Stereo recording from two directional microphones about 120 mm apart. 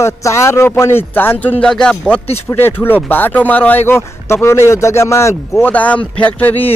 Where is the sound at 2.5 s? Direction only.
20° left (ahead or behind).